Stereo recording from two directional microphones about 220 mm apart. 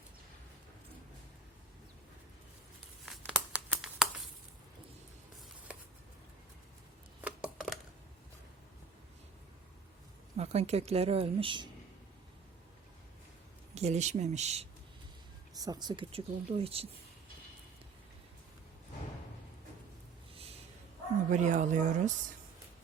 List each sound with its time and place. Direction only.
3.1 s crumpling: centre (ahead or behind)
7.2 s a sound: 5° right (ahead or behind)
10.3 s speech: 30° right (ahead or behind)
13.7 s speech: 30° right (ahead or behind)
15.5 s speech: 15° right (ahead or behind)
21.2 s speech: 35° right (ahead or behind)